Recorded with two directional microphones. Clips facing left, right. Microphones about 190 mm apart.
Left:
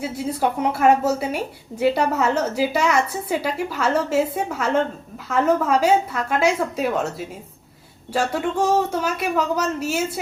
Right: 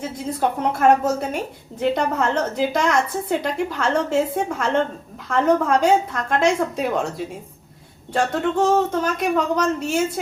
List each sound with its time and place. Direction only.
0.0 s a woman's voice: 10° left (ahead or behind)